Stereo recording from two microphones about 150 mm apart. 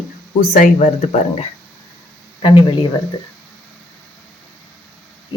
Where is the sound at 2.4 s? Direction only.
35° left (ahead or behind).